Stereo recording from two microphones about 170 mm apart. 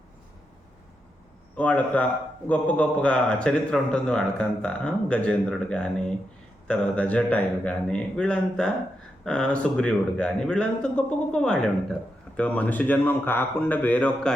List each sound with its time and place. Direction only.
1.5 s a man's voice: 10° left (ahead or behind)